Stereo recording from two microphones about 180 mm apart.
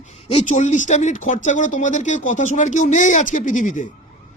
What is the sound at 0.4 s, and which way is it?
A man's voice, 40° left (ahead or behind).